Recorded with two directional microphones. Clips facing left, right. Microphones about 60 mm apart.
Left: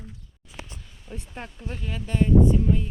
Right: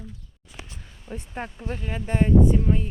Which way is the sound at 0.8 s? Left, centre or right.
Right.